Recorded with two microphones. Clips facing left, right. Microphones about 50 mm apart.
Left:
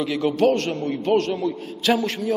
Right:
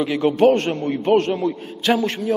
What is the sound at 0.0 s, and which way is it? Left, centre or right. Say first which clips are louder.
A man's voice: right 4 dB; right.